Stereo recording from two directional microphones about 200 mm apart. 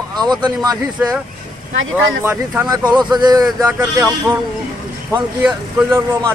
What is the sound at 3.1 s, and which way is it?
Speech, 20° right (ahead or behind).